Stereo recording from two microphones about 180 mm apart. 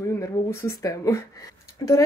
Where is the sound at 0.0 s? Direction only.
15° left (ahead or behind).